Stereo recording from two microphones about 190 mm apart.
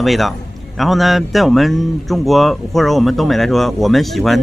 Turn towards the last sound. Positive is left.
turn(degrees=0)  # may be behind; listen again after turning